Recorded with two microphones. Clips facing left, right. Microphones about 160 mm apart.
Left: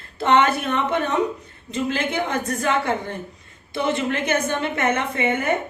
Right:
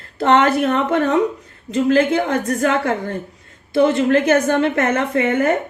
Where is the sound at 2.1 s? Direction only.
60° right (ahead or behind).